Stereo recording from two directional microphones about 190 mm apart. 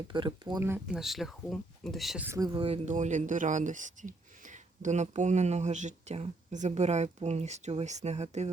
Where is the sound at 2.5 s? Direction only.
30° right (ahead or behind).